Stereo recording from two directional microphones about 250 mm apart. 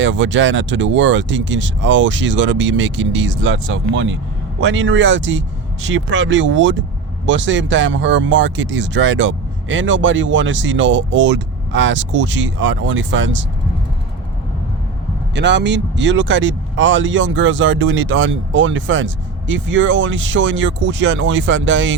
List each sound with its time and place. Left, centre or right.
0.0 s speech: right
15.4 s speech: right